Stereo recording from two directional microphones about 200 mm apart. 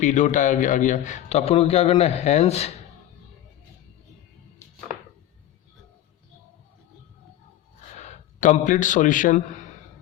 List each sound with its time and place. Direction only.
0.0 s a man's voice: 35° left (ahead or behind)
7.9 s a man's voice: 35° left (ahead or behind)